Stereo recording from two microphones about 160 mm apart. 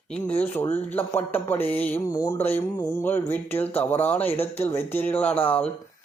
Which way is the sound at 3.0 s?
10° left (ahead or behind).